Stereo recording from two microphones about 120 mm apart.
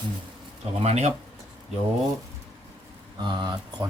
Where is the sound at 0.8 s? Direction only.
65° right (ahead or behind).